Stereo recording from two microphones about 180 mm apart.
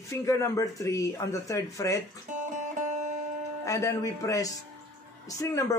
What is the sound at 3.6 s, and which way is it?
Speech, 20° left (ahead or behind).